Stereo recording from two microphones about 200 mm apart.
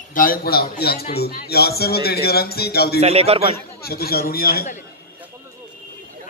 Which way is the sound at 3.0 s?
30° right (ahead or behind).